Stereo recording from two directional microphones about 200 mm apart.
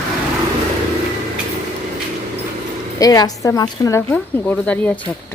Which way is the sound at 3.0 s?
20° left (ahead or behind).